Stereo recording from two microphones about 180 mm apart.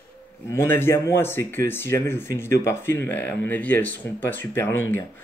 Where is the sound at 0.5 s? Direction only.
15° left (ahead or behind).